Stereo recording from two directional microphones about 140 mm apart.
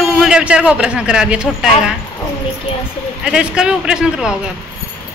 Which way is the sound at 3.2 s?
5° right (ahead or behind).